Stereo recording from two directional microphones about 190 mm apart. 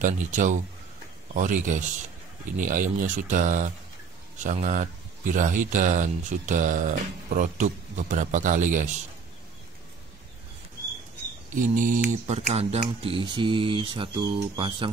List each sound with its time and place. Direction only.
0.0 s speech: 40° right (ahead or behind)
11.5 s speech: 45° right (ahead or behind); by 14.9 s 25° right (ahead or behind)